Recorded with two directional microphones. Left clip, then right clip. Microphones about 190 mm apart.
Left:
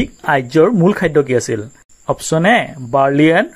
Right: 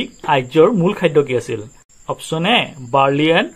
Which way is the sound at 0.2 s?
40° left (ahead or behind).